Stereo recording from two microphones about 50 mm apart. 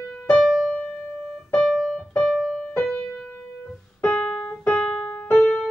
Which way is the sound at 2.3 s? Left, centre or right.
Centre.